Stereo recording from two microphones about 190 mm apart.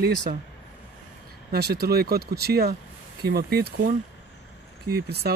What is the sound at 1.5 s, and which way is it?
Speech, 55° right (ahead or behind).